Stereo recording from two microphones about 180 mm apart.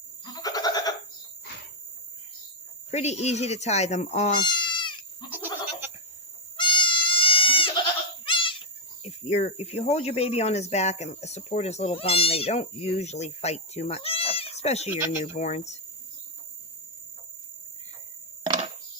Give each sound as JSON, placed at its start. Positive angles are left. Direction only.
{"t": 0.3, "sound": "goat", "side_deg": 20}
{"t": 2.9, "sound": "speech", "side_deg": 40}
{"t": 4.4, "sound": "goat", "side_deg": 25}
{"t": 5.3, "sound": "goat", "side_deg": -10}
{"t": 6.6, "sound": "goat", "side_deg": 25}
{"t": 8.2, "sound": "a sound", "side_deg": 30}
{"t": 9.0, "sound": "speech", "side_deg": 35}